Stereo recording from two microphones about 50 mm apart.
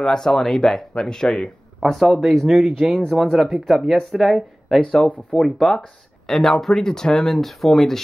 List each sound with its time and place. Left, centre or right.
0.0 s speech: centre
1.8 s speech: centre
4.8 s speech: centre